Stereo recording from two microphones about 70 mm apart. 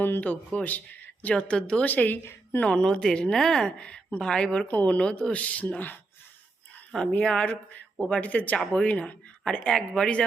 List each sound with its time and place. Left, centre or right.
0.0 s a woman's voice: left
2.6 s a woman's voice: centre
7.1 s a woman's voice: centre